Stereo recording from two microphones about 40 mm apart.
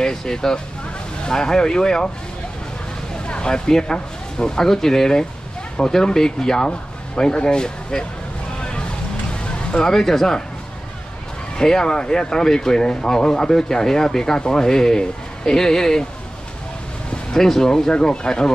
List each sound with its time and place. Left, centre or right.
0.0 s speech: centre
3.3 s speech: left
8.5 s vehicle: left
9.8 s speech: centre
11.5 s speech: centre
17.3 s speech: centre